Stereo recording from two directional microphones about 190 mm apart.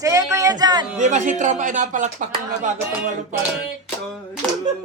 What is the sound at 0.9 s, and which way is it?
Speech, 40° right (ahead or behind).